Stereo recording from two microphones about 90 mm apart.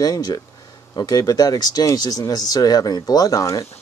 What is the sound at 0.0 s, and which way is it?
Speech, 45° left (ahead or behind).